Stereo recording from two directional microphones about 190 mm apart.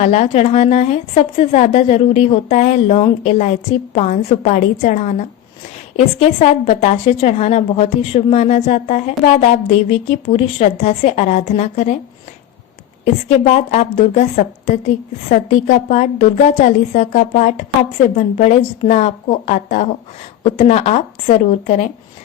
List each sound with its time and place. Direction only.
0.0 s a woman's voice: 35° left (ahead or behind)
13.2 s a woman's voice: 35° left (ahead or behind)